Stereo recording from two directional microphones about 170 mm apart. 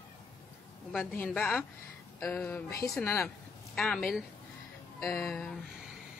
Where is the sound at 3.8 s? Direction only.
Centre (ahead or behind).